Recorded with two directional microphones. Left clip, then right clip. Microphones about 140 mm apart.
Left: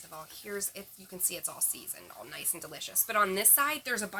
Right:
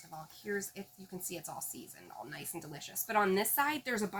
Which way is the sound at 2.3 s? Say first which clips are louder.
Left 8 dB; 25° left (ahead or behind).